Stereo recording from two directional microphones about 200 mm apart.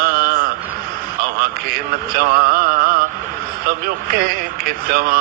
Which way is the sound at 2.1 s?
45° right (ahead or behind).